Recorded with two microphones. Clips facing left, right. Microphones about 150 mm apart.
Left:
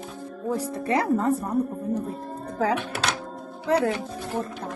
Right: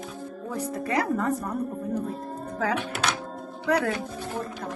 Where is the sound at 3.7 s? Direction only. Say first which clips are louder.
Left 2 dB; 25° left (ahead or behind).